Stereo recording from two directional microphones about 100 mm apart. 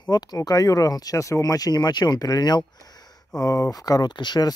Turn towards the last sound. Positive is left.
turn(degrees=45)  # may be behind; listen again after turning